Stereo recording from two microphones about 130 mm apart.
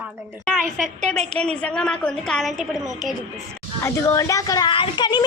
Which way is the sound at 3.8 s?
25° left (ahead or behind).